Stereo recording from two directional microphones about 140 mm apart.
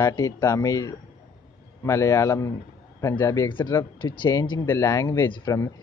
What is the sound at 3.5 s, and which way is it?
Speech, 35° left (ahead or behind).